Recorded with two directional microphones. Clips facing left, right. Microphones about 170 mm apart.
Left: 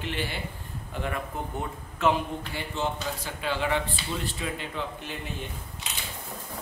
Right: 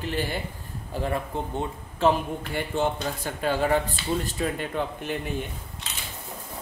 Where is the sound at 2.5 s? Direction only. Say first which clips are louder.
Right 6 dB; 50° right (ahead or behind).